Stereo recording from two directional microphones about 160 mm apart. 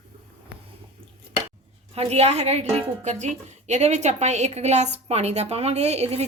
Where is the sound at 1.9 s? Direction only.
40° right (ahead or behind).